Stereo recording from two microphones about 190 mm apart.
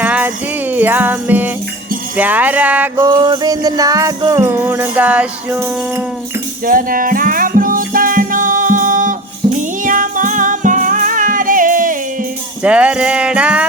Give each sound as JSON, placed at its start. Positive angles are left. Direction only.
{"t": 0.0, "sound": "music", "side_deg": -10}
{"t": 3.0, "sound": "music", "side_deg": -20}
{"t": 6.7, "sound": "music", "side_deg": -45}
{"t": 12.6, "sound": "speech", "side_deg": -5}